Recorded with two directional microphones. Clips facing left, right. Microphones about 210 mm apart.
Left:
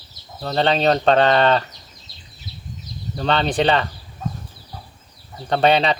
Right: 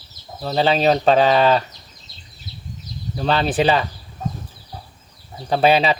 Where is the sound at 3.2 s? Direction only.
5° right (ahead or behind).